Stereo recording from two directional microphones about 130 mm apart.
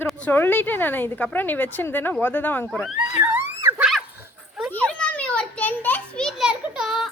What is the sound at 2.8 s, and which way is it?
Speech, centre (ahead or behind).